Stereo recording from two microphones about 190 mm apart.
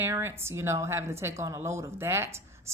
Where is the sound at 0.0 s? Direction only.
15° right (ahead or behind).